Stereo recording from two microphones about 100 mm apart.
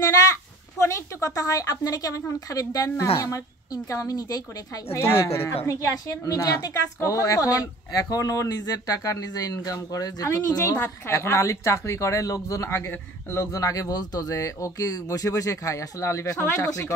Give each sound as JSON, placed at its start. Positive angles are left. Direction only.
{"t": 0.0, "sound": "a woman's voice", "side_deg": 35}
{"t": 4.9, "sound": "a woman's voice", "side_deg": 25}
{"t": 10.6, "sound": "a woman's voice", "side_deg": 25}